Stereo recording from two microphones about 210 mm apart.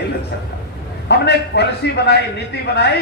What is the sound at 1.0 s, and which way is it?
A man's voice, 55° left (ahead or behind).